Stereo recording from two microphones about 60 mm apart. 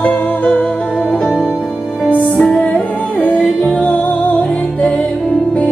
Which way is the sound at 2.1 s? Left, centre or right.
Left.